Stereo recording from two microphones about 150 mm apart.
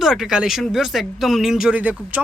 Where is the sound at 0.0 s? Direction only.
5° right (ahead or behind).